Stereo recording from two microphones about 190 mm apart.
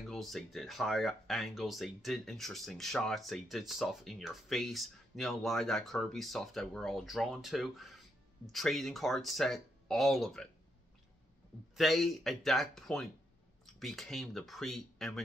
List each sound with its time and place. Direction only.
0.0 s speech: centre (ahead or behind)
11.7 s speech: centre (ahead or behind)